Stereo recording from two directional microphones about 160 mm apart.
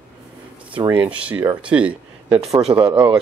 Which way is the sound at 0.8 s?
10° right (ahead or behind).